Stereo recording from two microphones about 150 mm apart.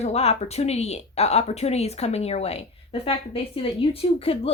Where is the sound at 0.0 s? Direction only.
45° left (ahead or behind).